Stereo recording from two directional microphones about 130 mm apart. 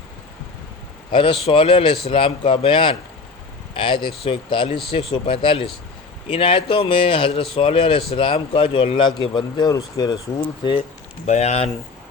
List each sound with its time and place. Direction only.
1.1 s speech: 40° left (ahead or behind)
10.6 s speech: 40° left (ahead or behind)
11.3 s speech: 55° left (ahead or behind)